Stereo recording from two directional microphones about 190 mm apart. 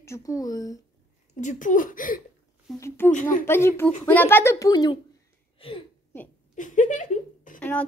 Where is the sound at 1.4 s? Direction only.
40° left (ahead or behind).